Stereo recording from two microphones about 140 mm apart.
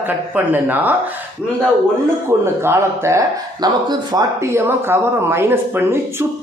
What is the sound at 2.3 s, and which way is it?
A man's voice, 20° right (ahead or behind).